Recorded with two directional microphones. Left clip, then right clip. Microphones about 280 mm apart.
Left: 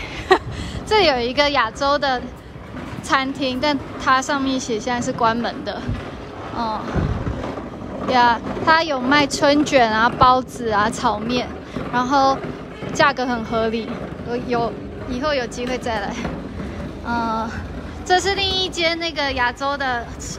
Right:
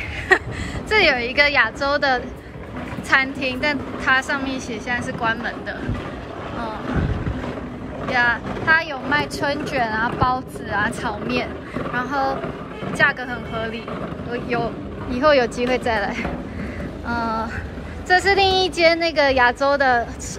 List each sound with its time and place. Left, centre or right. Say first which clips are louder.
0.3 s a sound: left 1 dB; centre
0.8 s a woman's voice: left 1 dB; centre
8.1 s a woman's voice: left 3 dB; centre